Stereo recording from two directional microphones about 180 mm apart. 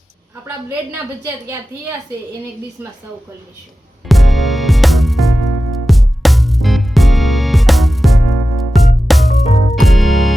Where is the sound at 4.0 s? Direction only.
Centre (ahead or behind).